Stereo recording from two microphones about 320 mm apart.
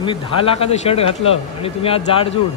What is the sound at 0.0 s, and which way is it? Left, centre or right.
A man's voice, centre.